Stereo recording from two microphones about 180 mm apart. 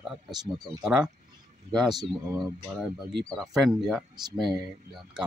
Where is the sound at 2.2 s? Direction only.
20° right (ahead or behind).